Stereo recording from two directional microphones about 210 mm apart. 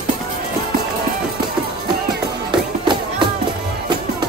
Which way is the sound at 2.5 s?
20° right (ahead or behind).